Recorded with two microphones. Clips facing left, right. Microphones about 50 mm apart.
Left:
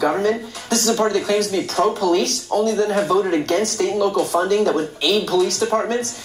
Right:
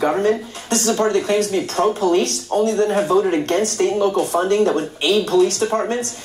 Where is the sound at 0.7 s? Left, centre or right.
Right.